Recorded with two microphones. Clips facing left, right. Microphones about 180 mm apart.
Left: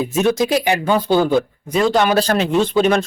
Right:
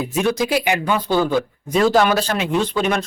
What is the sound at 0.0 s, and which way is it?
Speech, 25° left (ahead or behind).